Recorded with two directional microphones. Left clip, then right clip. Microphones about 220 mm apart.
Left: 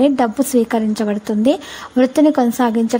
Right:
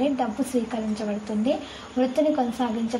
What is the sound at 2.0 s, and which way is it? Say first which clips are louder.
Speech: left 9 dB; 45° left (ahead or behind).